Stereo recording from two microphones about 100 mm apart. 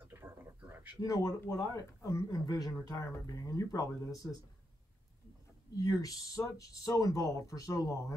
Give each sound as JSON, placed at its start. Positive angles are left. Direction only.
{"t": 0.0, "sound": "a sound", "side_deg": -20}
{"t": 1.0, "sound": "speech", "side_deg": 35}
{"t": 5.8, "sound": "speech", "side_deg": 35}